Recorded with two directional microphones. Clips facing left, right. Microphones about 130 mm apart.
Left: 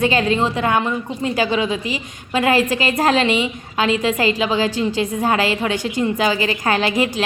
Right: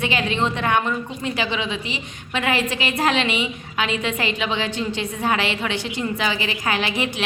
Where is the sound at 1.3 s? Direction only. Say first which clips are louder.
Left 7 dB; 45° left (ahead or behind).